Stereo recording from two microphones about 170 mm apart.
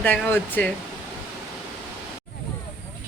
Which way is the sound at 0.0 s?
10° left (ahead or behind).